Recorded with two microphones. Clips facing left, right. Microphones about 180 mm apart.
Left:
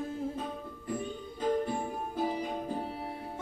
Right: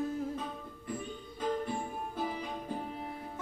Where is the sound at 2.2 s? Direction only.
40° left (ahead or behind).